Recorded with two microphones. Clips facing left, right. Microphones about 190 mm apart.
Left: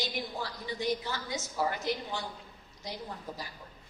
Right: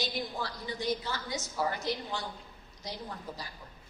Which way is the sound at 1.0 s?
20° left (ahead or behind).